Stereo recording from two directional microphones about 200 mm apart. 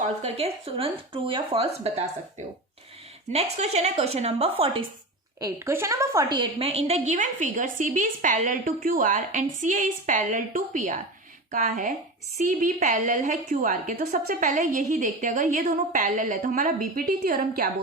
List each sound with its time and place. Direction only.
0.0 s speech: 30° right (ahead or behind)
3.3 s a woman's voice: 30° right (ahead or behind)
5.4 s a woman's voice: 15° right (ahead or behind); by 17.7 s 45° right (ahead or behind)